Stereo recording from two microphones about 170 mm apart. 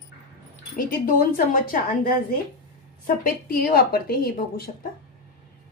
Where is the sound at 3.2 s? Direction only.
60° left (ahead or behind).